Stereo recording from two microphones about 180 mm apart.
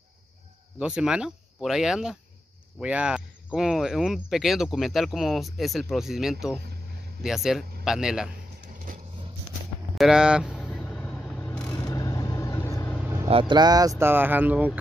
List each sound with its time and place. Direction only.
0.7 s speech: 5° right (ahead or behind)
9.9 s speech: 5° right (ahead or behind)
10.7 s vehicle: 5° left (ahead or behind)
11.7 s vehicle: 20° left (ahead or behind)
13.0 s vehicle: 15° right (ahead or behind)
13.3 s speech: 30° right (ahead or behind); by 14.7 s 10° right (ahead or behind)